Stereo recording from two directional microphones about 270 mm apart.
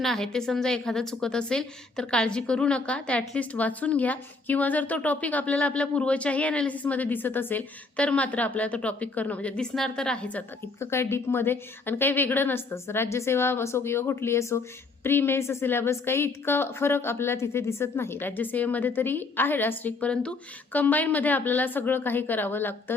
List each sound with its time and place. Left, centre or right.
0.0 s a woman's voice: centre